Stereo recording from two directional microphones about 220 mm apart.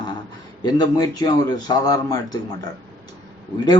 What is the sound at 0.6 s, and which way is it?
Speech, 20° left (ahead or behind).